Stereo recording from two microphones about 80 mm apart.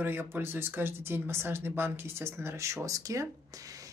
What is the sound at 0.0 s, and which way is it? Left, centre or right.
Speech, right.